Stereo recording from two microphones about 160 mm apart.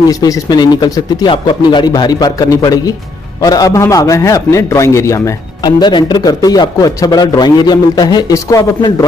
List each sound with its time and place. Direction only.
0.1 s a man's voice: 25° left (ahead or behind)